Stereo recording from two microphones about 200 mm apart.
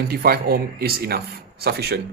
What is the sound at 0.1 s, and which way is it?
Speech, 50° right (ahead or behind).